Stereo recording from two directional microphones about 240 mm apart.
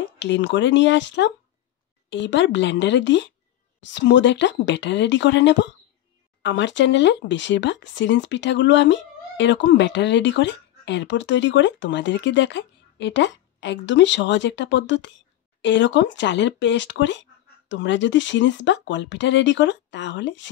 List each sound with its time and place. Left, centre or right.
0.2 s speech: left